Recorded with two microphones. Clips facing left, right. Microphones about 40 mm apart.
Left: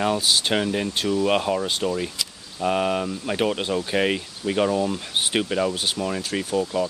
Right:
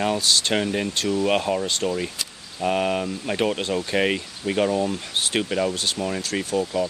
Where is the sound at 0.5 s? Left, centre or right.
Centre.